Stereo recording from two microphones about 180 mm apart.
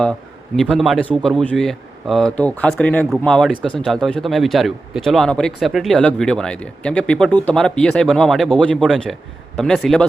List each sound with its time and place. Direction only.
0.5 s a man's voice: 5° left (ahead or behind)